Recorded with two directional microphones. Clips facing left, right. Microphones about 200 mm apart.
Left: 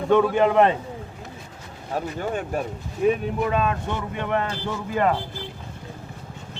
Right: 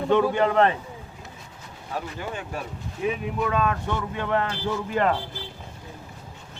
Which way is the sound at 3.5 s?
20° left (ahead or behind).